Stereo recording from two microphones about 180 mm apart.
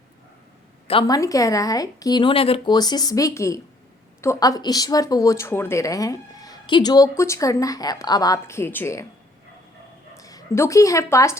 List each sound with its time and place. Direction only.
0.9 s speech: 25° left (ahead or behind)
10.2 s a woman's voice: 20° left (ahead or behind)